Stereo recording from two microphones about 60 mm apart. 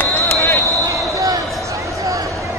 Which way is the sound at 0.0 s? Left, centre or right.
Left.